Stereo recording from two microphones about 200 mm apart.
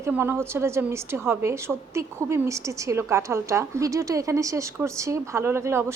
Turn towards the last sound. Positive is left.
turn(degrees=-15)  # may be behind; listen again after turning